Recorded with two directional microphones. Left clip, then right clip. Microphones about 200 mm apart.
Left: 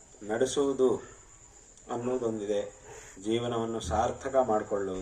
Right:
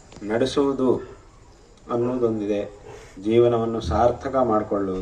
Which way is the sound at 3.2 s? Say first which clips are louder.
Right 12 dB; 50° left (ahead or behind).